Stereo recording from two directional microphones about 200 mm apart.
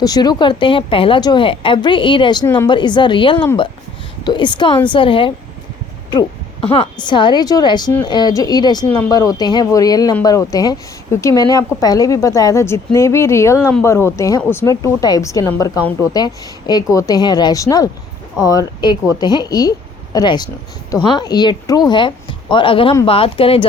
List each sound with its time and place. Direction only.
0.0 s a woman's voice: 20° left (ahead or behind)